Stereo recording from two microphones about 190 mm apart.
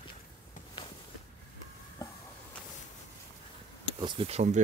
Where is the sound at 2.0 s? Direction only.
20° left (ahead or behind).